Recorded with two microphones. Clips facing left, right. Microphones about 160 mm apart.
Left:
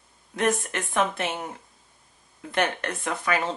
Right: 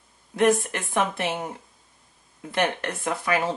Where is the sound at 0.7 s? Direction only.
20° right (ahead or behind).